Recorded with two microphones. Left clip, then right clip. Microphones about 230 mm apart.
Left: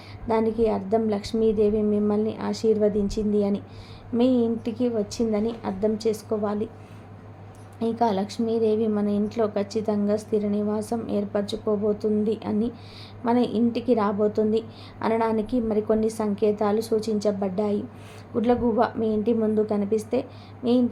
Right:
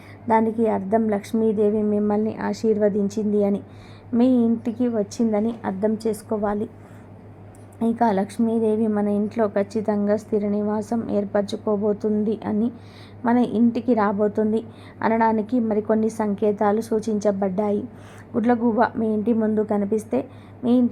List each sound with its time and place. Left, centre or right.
0.3 s a woman's voice: centre
7.8 s a woman's voice: centre